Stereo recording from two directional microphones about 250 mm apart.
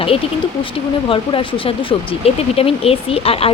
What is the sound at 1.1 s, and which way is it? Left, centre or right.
Speech, left.